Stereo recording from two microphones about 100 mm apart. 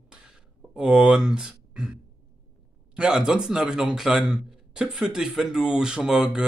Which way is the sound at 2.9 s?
10° right (ahead or behind).